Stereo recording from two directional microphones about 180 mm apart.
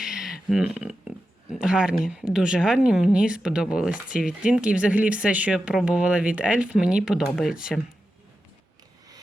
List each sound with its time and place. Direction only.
0.0 s speech: centre (ahead or behind)